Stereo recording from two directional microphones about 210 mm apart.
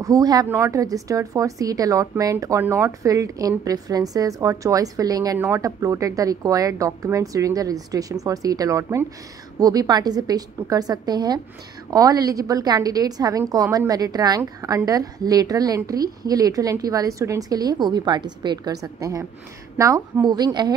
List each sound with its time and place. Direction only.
0.0 s a woman's voice: 15° right (ahead or behind)